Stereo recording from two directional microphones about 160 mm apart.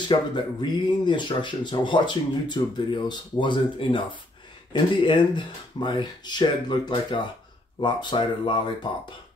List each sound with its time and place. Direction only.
0.1 s speech: 30° left (ahead or behind)